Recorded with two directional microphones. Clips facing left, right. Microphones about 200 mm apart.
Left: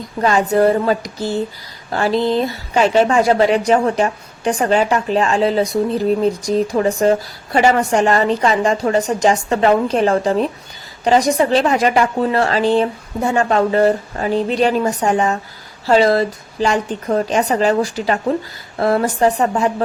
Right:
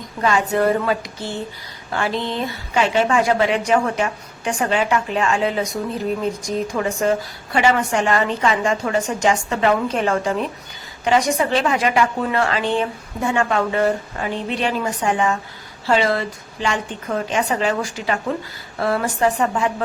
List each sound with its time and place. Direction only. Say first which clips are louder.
0.2 s a woman's voice: left 4 dB; 35° left (ahead or behind)